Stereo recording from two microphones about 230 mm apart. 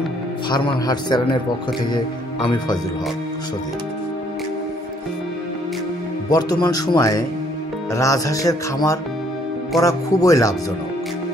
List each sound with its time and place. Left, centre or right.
0.5 s a man's voice: centre
6.3 s music: centre